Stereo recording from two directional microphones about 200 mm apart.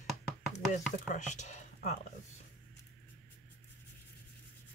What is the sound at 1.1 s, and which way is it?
Speech, 35° left (ahead or behind).